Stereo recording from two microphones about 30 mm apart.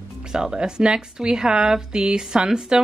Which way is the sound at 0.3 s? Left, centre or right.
Right.